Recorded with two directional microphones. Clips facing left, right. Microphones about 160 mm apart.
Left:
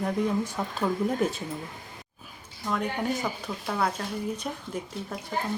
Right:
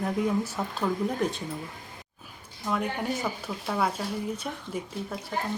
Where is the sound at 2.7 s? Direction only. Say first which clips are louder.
Left 1 dB; 5° right (ahead or behind).